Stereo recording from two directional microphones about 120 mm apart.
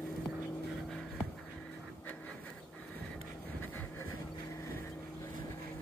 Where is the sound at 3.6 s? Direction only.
15° left (ahead or behind).